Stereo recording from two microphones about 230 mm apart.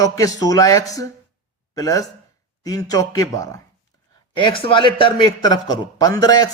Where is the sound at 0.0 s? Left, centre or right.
Centre.